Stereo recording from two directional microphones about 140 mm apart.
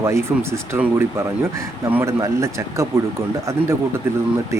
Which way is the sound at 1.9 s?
20° right (ahead or behind).